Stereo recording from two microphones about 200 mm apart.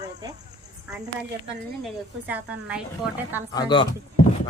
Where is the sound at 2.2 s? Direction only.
5° right (ahead or behind).